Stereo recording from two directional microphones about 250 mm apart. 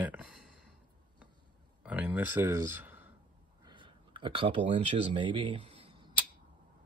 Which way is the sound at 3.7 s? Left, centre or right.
Centre.